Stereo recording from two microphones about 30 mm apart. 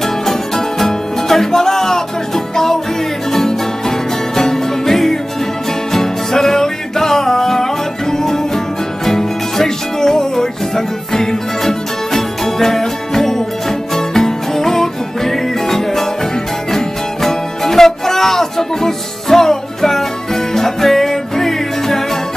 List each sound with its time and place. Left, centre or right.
0.0 s music: centre